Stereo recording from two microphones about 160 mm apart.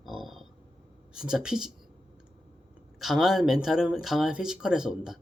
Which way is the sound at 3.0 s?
Centre (ahead or behind).